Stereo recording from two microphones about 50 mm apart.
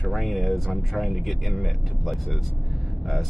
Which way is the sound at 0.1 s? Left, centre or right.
Centre.